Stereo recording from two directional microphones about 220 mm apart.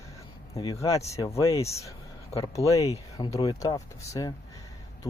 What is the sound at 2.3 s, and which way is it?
Speech, 15° left (ahead or behind).